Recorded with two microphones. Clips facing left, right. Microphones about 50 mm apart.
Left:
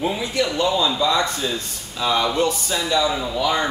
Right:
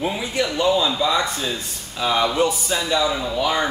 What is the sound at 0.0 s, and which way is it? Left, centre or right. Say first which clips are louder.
A man's voice: left 1 dB; centre.